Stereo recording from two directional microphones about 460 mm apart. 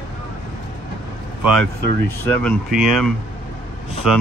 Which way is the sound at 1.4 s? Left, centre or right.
Centre.